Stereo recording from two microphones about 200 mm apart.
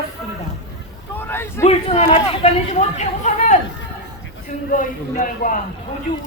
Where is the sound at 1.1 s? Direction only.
10° left (ahead or behind).